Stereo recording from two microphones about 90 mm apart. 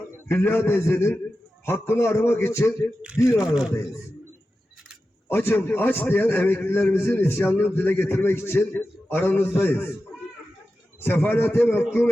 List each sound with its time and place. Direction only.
0.3 s a man's voice: 25° left (ahead or behind)
3.0 s speech: 10° right (ahead or behind)
5.3 s a man's voice: 25° left (ahead or behind)
11.0 s a man's voice: 25° left (ahead or behind)